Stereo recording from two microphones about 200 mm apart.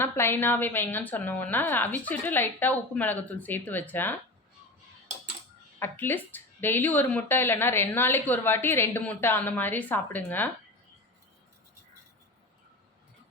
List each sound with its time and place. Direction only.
0.0 s speech: 10° left (ahead or behind)
5.8 s speech: 10° left (ahead or behind)